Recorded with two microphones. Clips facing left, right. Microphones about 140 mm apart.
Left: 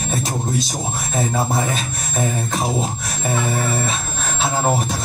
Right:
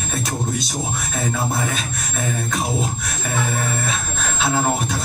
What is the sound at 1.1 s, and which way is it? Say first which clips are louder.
Speech: left 4 dB; 40° left (ahead or behind).